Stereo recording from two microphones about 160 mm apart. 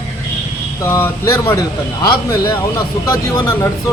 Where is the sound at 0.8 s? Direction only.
20° left (ahead or behind).